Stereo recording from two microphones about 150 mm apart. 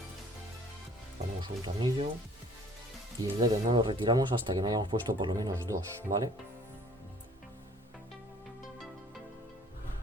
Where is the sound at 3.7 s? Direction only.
35° right (ahead or behind).